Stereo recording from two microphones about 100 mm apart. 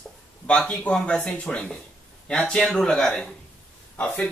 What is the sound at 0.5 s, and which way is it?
Speech, 10° left (ahead or behind).